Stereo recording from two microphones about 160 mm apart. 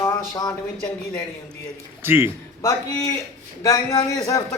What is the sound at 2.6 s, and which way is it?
A man's voice, 20° left (ahead or behind).